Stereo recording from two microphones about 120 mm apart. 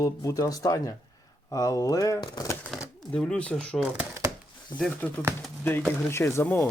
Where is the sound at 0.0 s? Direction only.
30° left (ahead or behind).